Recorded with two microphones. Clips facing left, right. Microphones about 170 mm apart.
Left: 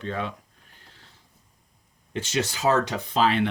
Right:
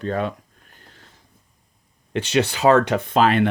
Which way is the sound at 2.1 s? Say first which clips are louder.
Right 7 dB; 65° right (ahead or behind).